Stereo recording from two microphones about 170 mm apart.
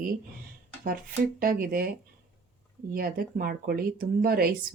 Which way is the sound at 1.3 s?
60° right (ahead or behind).